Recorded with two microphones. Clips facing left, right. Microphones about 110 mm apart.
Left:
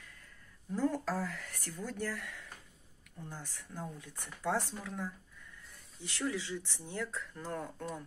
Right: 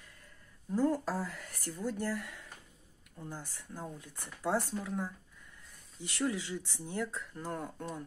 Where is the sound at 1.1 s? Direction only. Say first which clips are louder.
Even; 30° right (ahead or behind).